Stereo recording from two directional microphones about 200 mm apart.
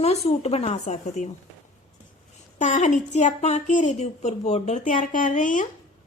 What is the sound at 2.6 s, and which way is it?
A woman's voice, 40° left (ahead or behind).